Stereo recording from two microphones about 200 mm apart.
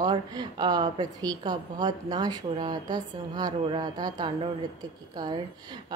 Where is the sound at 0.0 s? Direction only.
20° right (ahead or behind).